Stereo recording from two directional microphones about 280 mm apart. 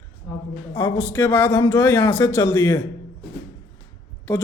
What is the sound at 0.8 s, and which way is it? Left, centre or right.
Speech, centre.